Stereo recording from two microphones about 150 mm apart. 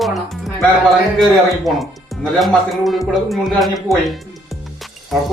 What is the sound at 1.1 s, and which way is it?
Speech, centre (ahead or behind).